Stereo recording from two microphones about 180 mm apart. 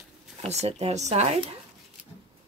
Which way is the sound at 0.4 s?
35° right (ahead or behind).